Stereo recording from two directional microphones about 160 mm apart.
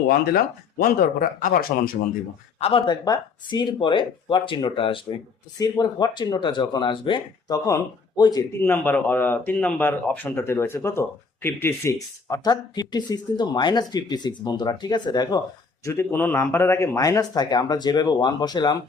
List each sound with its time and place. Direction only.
0.1 s speech: 65° left (ahead or behind)
2.6 s speech: 40° left (ahead or behind)
2.8 s speech: 25° left (ahead or behind)
8.6 s speech: 10° left (ahead or behind)